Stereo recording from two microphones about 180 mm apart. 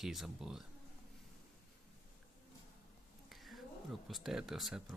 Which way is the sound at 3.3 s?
Centre (ahead or behind).